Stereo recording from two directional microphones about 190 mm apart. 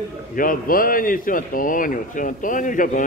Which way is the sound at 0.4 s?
50° left (ahead or behind).